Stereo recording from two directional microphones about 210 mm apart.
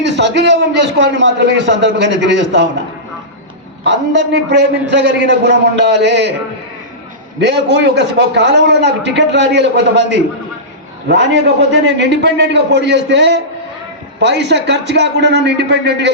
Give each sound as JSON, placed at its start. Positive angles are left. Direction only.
{"t": 0.0, "sound": "a man's voice", "side_deg": -55}
{"t": 3.8, "sound": "a man's voice", "side_deg": -55}
{"t": 7.3, "sound": "a man's voice", "side_deg": -55}